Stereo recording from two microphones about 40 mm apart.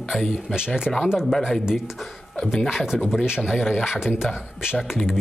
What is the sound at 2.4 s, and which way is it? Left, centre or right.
Speech, centre.